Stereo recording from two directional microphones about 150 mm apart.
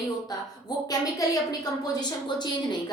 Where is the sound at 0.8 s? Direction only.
25° left (ahead or behind).